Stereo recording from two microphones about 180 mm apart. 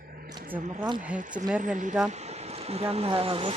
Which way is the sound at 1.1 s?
45° right (ahead or behind).